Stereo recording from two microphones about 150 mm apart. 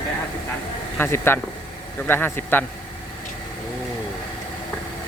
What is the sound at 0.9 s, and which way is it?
Speech, 15° left (ahead or behind).